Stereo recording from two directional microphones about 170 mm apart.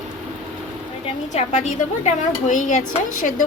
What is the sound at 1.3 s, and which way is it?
A woman's voice, 45° left (ahead or behind).